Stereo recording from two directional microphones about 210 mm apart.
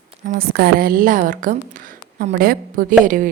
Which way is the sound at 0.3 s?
45° right (ahead or behind).